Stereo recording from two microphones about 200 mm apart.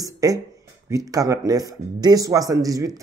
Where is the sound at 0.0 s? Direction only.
20° right (ahead or behind).